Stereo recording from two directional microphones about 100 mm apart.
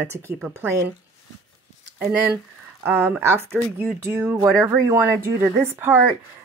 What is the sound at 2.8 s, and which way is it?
Speech, 20° right (ahead or behind).